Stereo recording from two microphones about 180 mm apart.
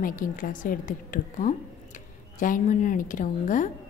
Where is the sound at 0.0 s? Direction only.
50° left (ahead or behind).